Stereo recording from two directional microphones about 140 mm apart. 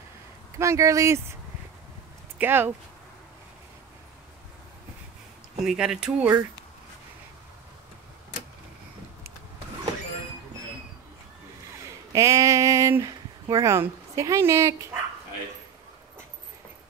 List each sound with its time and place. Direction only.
0.6 s speech: 20° right (ahead or behind)
2.3 s speech: 15° right (ahead or behind)
5.7 s speech: 5° right (ahead or behind)
12.1 s speech: 25° right (ahead or behind)